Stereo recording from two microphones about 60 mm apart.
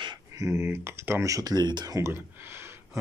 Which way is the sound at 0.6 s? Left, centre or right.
Right.